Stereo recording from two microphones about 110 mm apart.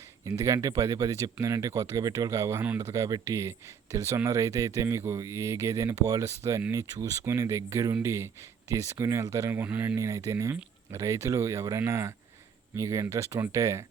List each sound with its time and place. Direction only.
0.3 s speech: 30° right (ahead or behind)